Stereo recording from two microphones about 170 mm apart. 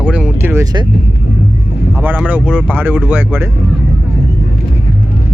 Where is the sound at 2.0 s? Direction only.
10° right (ahead or behind).